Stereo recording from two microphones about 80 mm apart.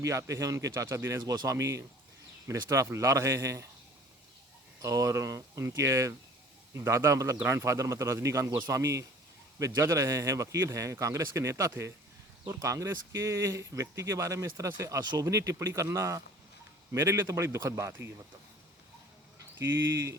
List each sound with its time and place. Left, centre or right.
0.0 s speech: right
4.8 s speech: right
19.5 s speech: right